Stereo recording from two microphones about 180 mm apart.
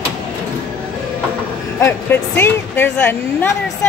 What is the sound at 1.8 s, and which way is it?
Speech, 15° left (ahead or behind).